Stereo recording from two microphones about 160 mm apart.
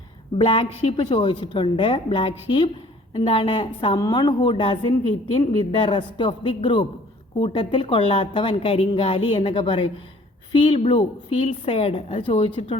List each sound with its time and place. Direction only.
0.3 s a woman's voice: 30° left (ahead or behind)